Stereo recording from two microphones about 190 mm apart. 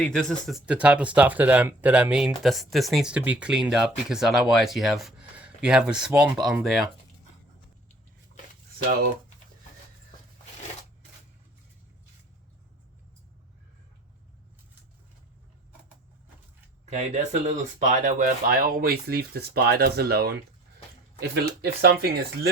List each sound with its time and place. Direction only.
0.0 s speech: 5° left (ahead or behind)
16.8 s speech: 35° right (ahead or behind); by 22.3 s 55° right (ahead or behind)